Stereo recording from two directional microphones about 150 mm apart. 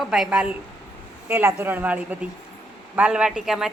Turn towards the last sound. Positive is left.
turn(degrees=-5)  # may be behind; listen again after turning